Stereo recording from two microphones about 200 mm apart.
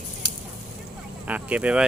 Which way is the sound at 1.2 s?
5° right (ahead or behind).